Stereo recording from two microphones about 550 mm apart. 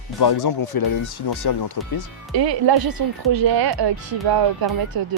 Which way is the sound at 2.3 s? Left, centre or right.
Right.